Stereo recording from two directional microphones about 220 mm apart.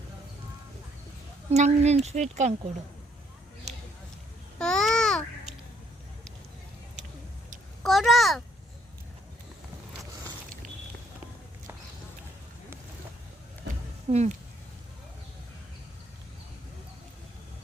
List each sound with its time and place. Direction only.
1.5 s speech: 30° right (ahead or behind)
4.5 s babbling: 5° left (ahead or behind)
7.9 s a sound: centre (ahead or behind)
14.1 s speech: 30° right (ahead or behind)